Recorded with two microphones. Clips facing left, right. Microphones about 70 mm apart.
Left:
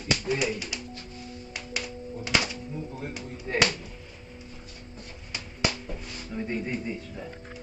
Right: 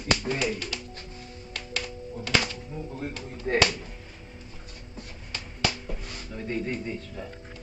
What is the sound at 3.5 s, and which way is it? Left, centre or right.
Music, right.